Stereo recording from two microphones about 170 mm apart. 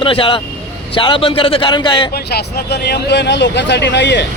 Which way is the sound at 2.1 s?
70° left (ahead or behind).